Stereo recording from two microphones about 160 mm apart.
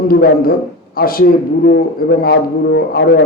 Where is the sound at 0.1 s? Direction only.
70° left (ahead or behind).